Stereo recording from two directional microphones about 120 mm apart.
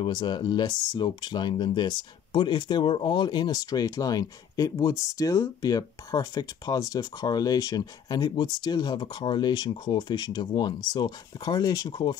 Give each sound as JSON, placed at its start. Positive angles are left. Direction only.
{"t": 0.0, "sound": "speech", "side_deg": 40}